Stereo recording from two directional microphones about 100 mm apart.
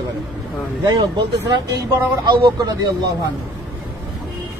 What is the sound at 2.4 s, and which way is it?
Speech, 45° right (ahead or behind).